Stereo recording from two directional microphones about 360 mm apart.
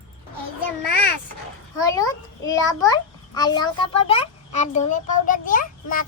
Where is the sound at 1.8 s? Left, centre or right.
Centre.